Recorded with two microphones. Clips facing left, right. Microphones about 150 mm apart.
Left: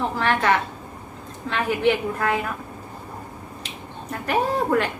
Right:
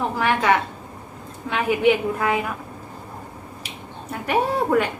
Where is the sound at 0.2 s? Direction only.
10° right (ahead or behind).